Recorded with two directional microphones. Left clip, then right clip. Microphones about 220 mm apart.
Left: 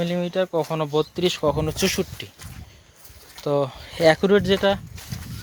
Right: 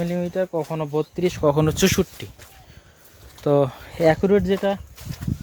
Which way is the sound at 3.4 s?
40° right (ahead or behind).